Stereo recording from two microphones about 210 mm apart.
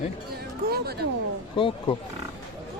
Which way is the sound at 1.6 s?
25° left (ahead or behind).